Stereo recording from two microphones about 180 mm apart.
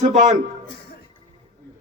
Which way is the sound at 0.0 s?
40° right (ahead or behind).